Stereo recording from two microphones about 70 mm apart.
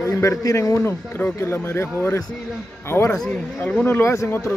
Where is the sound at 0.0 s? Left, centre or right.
Left.